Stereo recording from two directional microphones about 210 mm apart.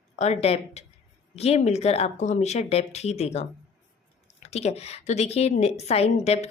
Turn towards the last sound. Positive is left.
turn(degrees=30)  # may be behind; listen again after turning